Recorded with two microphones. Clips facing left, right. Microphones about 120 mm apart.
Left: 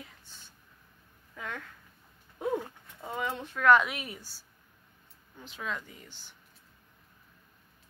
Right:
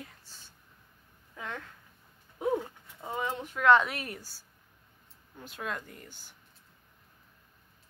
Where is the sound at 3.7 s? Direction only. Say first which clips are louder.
Even; 35° right (ahead or behind).